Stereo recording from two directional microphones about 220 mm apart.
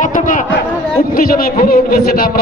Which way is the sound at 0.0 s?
35° left (ahead or behind).